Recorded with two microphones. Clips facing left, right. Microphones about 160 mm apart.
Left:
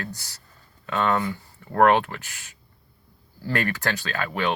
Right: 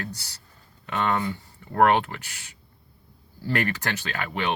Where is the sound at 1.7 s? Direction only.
15° right (ahead or behind).